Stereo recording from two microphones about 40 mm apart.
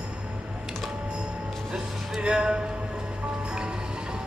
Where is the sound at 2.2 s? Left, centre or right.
Right.